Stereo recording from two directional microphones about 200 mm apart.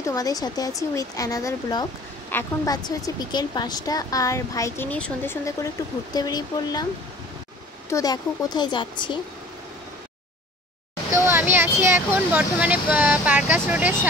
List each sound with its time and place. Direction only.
0.1 s a woman's voice: 20° left (ahead or behind)
7.9 s a woman's voice: 20° left (ahead or behind)
11.2 s speech: 10° right (ahead or behind)